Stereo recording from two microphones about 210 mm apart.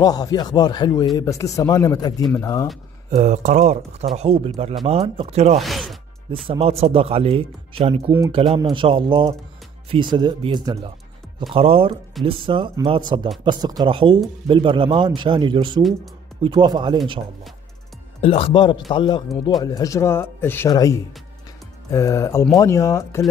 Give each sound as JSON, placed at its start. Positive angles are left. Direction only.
{"t": 0.0, "sound": "speech", "side_deg": 15}
{"t": 3.1, "sound": "speech", "side_deg": -35}
{"t": 5.6, "sound": "speech", "side_deg": 0}
{"t": 6.4, "sound": "speech", "side_deg": -25}
{"t": 18.2, "sound": "speech", "side_deg": 25}